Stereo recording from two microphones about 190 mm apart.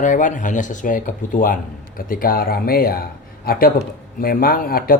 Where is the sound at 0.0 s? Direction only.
45° left (ahead or behind).